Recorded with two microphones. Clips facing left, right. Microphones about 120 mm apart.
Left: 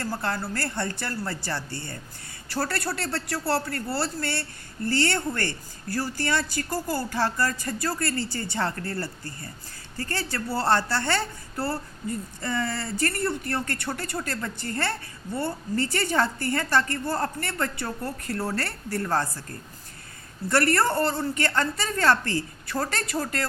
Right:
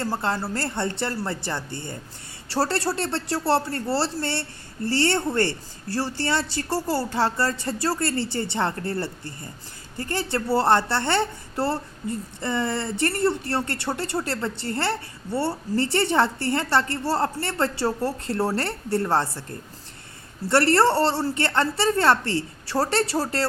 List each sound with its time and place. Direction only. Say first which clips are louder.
0.0 s a woman's voice: right 3 dB; 25° right (ahead or behind)